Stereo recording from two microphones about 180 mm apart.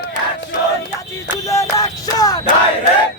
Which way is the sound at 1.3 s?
15° left (ahead or behind).